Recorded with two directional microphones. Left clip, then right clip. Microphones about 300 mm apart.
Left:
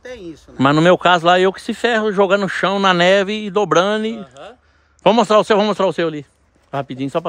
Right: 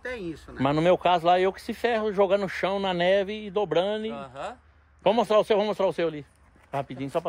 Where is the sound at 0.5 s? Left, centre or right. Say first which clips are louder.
Left 10 dB; left.